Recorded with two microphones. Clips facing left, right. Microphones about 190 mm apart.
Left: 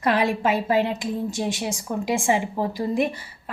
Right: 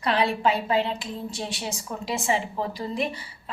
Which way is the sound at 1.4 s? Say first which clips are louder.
Left 6 dB; 50° left (ahead or behind).